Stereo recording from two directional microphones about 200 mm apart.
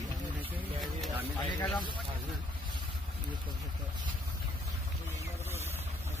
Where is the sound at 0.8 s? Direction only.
Centre (ahead or behind).